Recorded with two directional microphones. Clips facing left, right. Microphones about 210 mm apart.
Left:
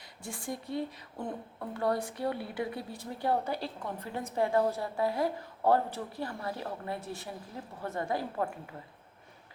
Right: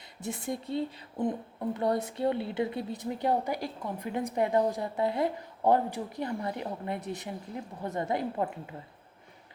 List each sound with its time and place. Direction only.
0.2 s a woman's voice: 25° right (ahead or behind)